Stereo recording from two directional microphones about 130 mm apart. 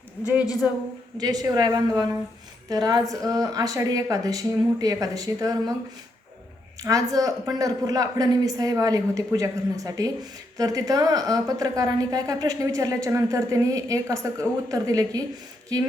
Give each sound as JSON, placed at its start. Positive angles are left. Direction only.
{"t": 0.6, "sound": "a woman's voice", "side_deg": -10}
{"t": 1.2, "sound": "a woman's voice", "side_deg": -30}
{"t": 6.8, "sound": "a woman's voice", "side_deg": -25}